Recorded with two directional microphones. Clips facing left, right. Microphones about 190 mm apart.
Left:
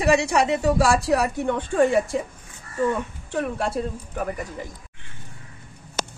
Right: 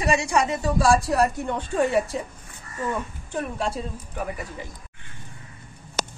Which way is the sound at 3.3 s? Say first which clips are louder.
Left 3 dB; 60° left (ahead or behind).